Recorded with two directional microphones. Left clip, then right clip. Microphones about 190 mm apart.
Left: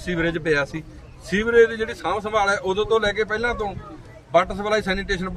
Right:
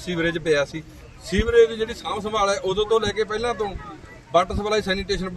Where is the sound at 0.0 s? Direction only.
30° left (ahead or behind).